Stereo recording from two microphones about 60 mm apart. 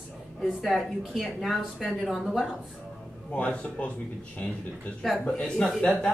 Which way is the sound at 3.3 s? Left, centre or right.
Left.